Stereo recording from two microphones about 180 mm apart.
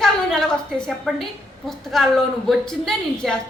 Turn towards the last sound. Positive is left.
turn(degrees=5)  # may be behind; listen again after turning